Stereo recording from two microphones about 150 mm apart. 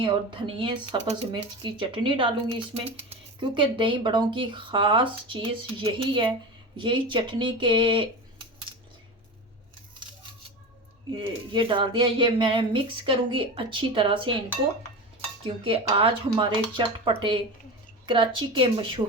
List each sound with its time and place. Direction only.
0.0 s speech: 35° right (ahead or behind)
11.1 s speech: 35° right (ahead or behind)
15.6 s speech: 35° right (ahead or behind)